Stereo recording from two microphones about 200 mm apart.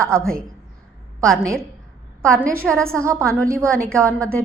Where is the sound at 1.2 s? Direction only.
Centre (ahead or behind).